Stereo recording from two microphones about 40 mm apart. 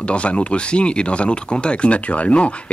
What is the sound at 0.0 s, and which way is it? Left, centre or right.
Speech, left.